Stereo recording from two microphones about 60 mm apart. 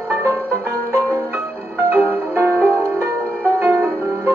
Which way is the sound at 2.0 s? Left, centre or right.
Right.